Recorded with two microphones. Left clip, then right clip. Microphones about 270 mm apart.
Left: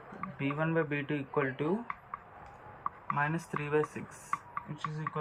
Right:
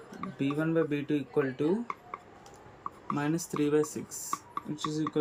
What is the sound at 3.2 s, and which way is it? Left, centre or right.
Speech, right.